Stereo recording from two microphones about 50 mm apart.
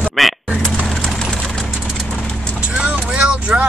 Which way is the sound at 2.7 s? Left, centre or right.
Right.